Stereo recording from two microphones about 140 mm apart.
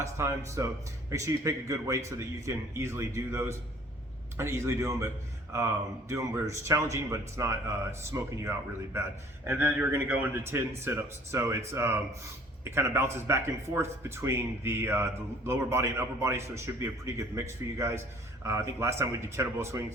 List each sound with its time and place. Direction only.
0.0 s speech: 20° right (ahead or behind)